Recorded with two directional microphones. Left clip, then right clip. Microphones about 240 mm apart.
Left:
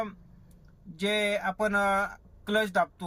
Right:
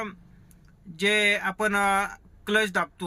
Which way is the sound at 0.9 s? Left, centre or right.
Centre.